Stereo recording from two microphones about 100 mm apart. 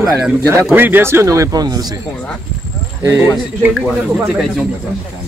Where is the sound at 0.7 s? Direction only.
20° right (ahead or behind); by 1.9 s 40° right (ahead or behind).